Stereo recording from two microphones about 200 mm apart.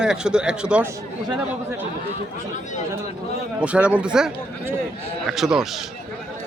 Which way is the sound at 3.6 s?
5° right (ahead or behind).